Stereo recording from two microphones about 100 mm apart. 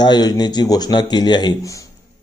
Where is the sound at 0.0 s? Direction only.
45° left (ahead or behind).